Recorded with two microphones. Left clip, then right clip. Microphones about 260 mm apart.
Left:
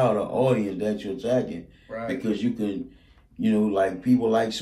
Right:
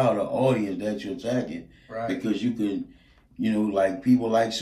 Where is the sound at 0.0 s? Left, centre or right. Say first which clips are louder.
Even; centre.